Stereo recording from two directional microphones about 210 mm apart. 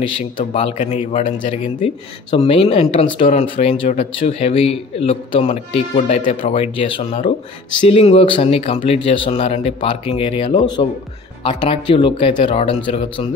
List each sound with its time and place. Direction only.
0.4 s speech: 35° left (ahead or behind)
3.2 s speech: 35° left (ahead or behind)